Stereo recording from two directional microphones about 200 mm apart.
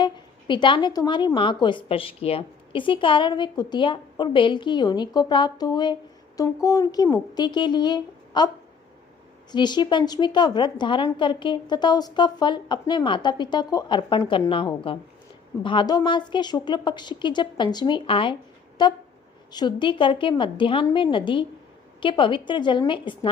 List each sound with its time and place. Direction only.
0.0 s a woman's voice: 25° left (ahead or behind)
9.5 s a woman's voice: 20° left (ahead or behind)